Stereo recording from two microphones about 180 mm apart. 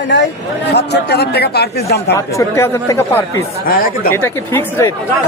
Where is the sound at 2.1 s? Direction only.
15° left (ahead or behind).